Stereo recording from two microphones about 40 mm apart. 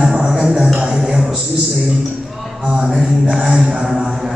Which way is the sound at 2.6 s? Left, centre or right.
Right.